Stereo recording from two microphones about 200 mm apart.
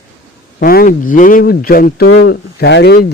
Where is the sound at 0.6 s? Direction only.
50° left (ahead or behind).